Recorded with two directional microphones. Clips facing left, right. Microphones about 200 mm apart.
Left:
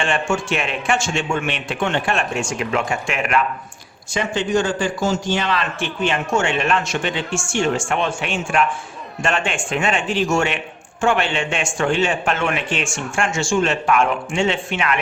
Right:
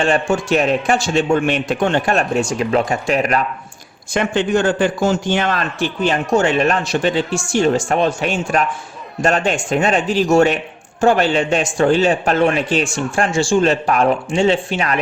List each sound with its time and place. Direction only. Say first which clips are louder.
0.0 s a man's voice: right 5 dB; 40° right (ahead or behind)
4.1 s a man's voice: right 3 dB; 55° right (ahead or behind); by 14.9 s 35° right (ahead or behind)